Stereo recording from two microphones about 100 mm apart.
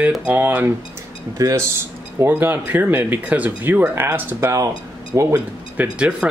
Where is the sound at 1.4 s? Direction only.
35° right (ahead or behind).